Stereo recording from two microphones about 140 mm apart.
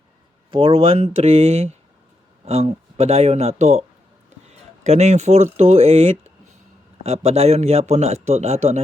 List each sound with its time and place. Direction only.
0.5 s a man's voice: 40° right (ahead or behind)